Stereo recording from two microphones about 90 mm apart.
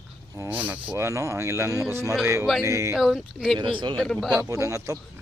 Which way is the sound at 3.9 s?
5° left (ahead or behind).